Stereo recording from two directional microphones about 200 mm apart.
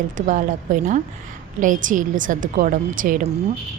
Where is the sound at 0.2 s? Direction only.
40° right (ahead or behind).